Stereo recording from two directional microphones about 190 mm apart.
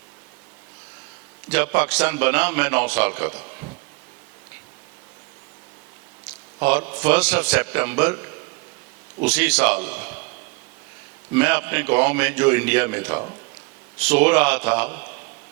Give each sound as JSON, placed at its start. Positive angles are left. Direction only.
{"t": 1.5, "sound": "a man's voice", "side_deg": -10}
{"t": 6.6, "sound": "a man's voice", "side_deg": -10}
{"t": 9.2, "sound": "a man's voice", "side_deg": -5}
{"t": 11.3, "sound": "a man's voice", "side_deg": -10}